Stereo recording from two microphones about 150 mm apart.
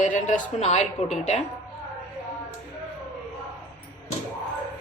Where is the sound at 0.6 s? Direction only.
50° left (ahead or behind).